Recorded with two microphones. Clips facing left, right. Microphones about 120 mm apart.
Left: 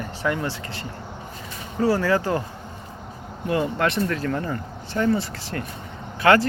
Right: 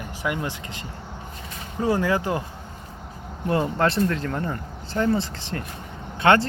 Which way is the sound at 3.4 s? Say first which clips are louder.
Right 1 dB; 30° right (ahead or behind).